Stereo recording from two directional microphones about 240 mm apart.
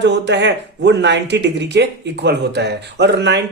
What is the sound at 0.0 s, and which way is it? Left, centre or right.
Speech, right.